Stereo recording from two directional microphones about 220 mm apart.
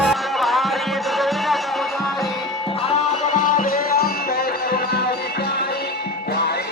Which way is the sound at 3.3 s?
40° left (ahead or behind).